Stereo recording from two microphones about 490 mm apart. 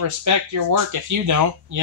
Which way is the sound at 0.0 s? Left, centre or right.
Right.